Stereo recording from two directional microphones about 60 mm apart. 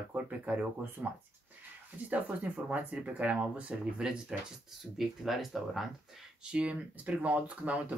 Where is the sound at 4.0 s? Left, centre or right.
Centre.